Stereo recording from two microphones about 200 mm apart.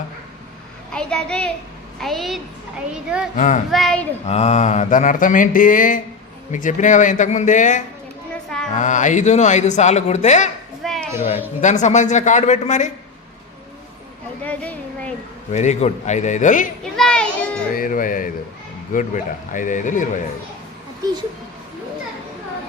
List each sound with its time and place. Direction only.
0.9 s a child's voice: 5° left (ahead or behind)
3.3 s speech: 40° left (ahead or behind)
3.7 s a child's voice: centre (ahead or behind)
4.3 s speech: 35° left (ahead or behind)
10.8 s a sound: centre (ahead or behind)
11.6 s speech: 35° left (ahead or behind)
14.4 s speech: 5° left (ahead or behind)
15.5 s speech: 35° left (ahead or behind)
17.0 s children playing: 5° left (ahead or behind)
17.7 s speech: 45° left (ahead or behind)